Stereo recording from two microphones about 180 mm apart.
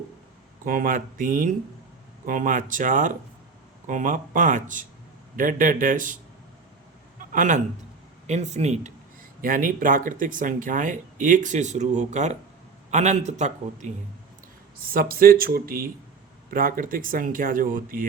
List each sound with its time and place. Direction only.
0.6 s speech: 50° right (ahead or behind)
7.3 s a man's voice: 45° right (ahead or behind)
9.4 s a man's voice: 50° right (ahead or behind)
14.8 s speech: 55° right (ahead or behind)